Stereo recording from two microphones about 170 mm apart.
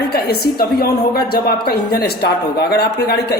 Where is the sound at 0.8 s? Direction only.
65° left (ahead or behind).